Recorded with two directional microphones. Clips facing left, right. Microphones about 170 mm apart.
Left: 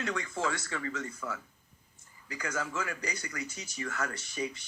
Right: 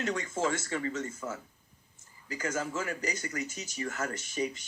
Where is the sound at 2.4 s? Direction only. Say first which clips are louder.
Right 2 dB; 20° right (ahead or behind).